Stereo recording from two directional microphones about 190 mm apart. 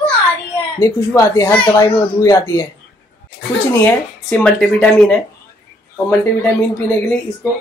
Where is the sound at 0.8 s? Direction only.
15° left (ahead or behind).